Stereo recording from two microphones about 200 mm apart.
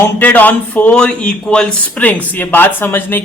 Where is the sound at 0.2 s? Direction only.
10° left (ahead or behind).